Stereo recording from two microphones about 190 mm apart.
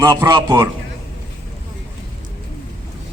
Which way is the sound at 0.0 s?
20° right (ahead or behind).